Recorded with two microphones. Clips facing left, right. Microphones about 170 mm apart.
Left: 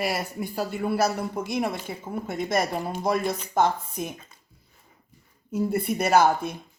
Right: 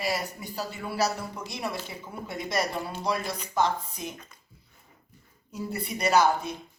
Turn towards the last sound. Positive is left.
turn(degrees=55)  # may be behind; listen again after turning